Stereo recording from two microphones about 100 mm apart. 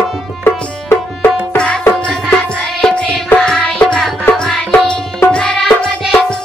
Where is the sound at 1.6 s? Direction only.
10° left (ahead or behind).